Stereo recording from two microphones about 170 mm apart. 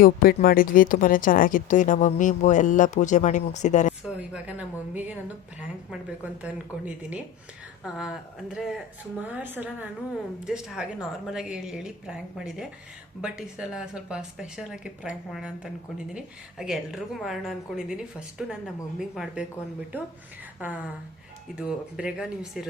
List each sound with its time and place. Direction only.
0.0 s speech: 60° left (ahead or behind)
4.0 s speech: 5° right (ahead or behind)
20.6 s speech: 10° right (ahead or behind)